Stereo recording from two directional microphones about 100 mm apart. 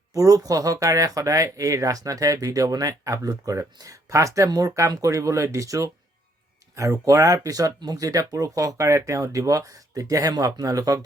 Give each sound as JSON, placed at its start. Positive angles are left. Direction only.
{"t": 0.1, "sound": "speech", "side_deg": -35}